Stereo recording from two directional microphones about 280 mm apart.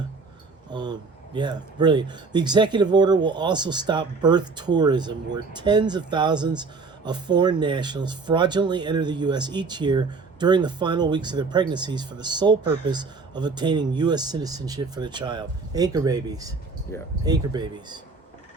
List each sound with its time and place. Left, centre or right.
0.7 s speech: centre
16.9 s speech: centre
17.2 s speech: centre